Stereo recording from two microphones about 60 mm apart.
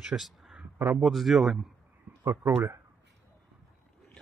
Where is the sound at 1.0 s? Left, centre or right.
Centre.